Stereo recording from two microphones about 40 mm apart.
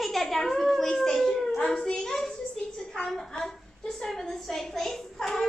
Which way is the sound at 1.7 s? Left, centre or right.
Centre.